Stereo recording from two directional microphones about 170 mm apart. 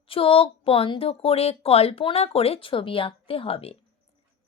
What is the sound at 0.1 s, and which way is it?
A woman's voice, 30° left (ahead or behind).